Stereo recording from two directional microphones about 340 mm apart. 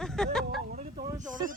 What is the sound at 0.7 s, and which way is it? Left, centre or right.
Speech, centre.